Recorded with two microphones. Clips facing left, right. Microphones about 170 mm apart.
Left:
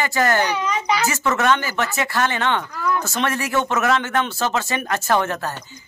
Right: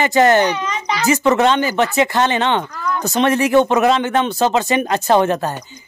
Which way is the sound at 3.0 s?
20° right (ahead or behind).